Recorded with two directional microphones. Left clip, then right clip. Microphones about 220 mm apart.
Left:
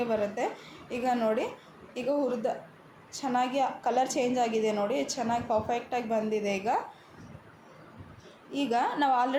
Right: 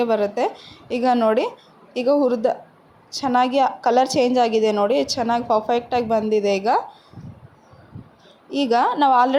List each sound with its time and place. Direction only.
0.0 s a woman's voice: 35° right (ahead or behind)
8.4 s a woman's voice: 35° right (ahead or behind)